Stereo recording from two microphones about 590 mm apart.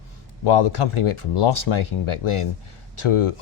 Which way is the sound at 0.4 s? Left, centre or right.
Left.